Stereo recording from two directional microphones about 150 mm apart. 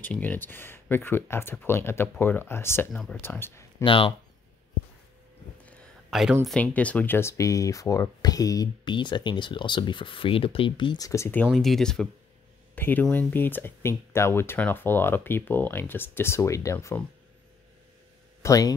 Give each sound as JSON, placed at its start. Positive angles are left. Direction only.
{"t": 0.0, "sound": "speech", "side_deg": 10}
{"t": 2.9, "sound": "speech", "side_deg": 0}
{"t": 3.2, "sound": "speech", "side_deg": 15}
{"t": 3.8, "sound": "speech", "side_deg": 35}
{"t": 6.0, "sound": "a sound", "side_deg": 0}
{"t": 6.4, "sound": "speech", "side_deg": 10}
{"t": 11.5, "sound": "speech", "side_deg": 0}
{"t": 18.4, "sound": "speech", "side_deg": 20}